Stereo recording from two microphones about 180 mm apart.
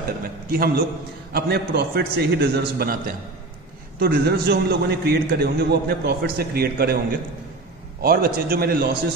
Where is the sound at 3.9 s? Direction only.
60° right (ahead or behind).